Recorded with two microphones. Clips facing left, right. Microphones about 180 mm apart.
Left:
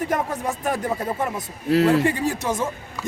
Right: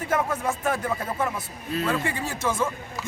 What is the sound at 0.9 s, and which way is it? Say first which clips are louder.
Speech: left 2 dB; 20° left (ahead or behind).